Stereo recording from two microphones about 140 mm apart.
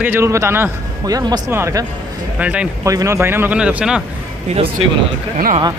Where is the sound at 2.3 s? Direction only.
10° right (ahead or behind).